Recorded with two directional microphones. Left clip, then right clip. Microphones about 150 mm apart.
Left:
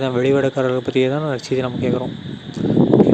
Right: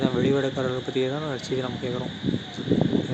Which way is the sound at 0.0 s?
50° left (ahead or behind).